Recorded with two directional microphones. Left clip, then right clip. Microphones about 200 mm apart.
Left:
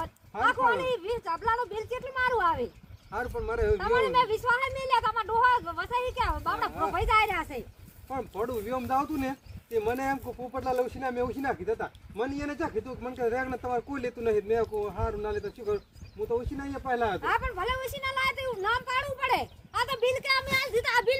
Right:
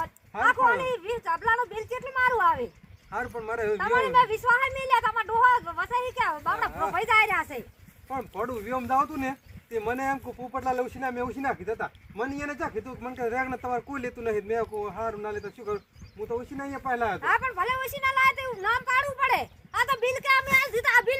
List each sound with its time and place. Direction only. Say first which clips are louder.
0.0 s a sound: right 3 dB; 10° left (ahead or behind)
3.1 s speech: right 1 dB; 5° right (ahead or behind)
3.8 s speech: right 5 dB; 10° left (ahead or behind)
20.6 s speech: right 4 dB; 15° left (ahead or behind)